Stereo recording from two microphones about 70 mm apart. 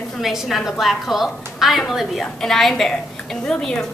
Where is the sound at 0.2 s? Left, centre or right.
Centre.